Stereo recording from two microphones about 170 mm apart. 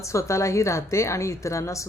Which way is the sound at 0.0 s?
15° left (ahead or behind).